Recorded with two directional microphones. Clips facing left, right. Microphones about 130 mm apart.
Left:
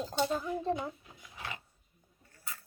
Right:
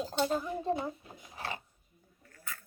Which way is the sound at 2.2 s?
30° left (ahead or behind).